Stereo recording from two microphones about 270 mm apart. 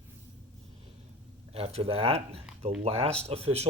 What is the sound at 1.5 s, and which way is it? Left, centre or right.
Speech, right.